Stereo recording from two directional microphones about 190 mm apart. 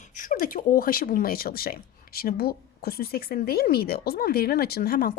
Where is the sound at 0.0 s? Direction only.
45° left (ahead or behind).